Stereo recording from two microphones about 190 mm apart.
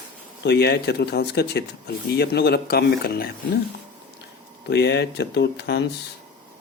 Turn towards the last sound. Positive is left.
turn(degrees=60)  # may be behind; listen again after turning